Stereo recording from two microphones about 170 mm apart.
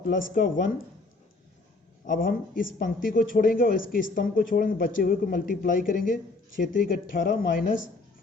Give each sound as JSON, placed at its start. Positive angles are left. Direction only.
{"t": 0.1, "sound": "speech", "side_deg": 55}
{"t": 2.0, "sound": "speech", "side_deg": 55}